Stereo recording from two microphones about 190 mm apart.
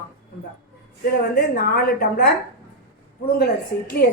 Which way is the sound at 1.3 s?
55° left (ahead or behind).